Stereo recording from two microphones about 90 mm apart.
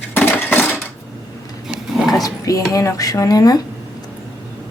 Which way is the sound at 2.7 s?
40° left (ahead or behind).